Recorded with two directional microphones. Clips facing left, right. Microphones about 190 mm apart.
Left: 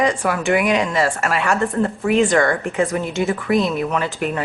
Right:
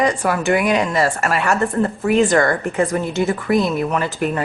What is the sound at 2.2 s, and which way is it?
Speech, 40° right (ahead or behind).